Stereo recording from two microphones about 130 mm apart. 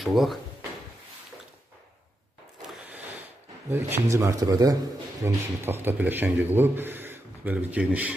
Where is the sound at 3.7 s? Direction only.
20° right (ahead or behind).